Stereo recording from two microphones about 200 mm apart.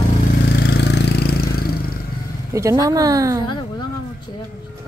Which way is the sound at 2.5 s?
15° right (ahead or behind).